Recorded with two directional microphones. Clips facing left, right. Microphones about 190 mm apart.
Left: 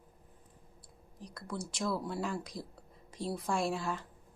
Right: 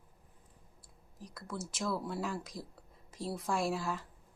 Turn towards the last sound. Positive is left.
turn(degrees=0)  # may be behind; listen again after turning